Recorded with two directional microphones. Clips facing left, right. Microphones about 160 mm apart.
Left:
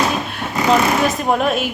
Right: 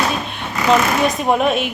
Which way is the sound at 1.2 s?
Centre (ahead or behind).